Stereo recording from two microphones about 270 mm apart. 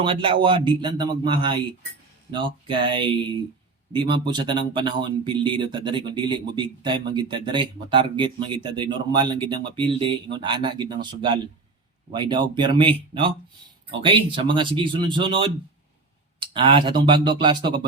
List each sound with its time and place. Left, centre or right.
0.0 s speech: centre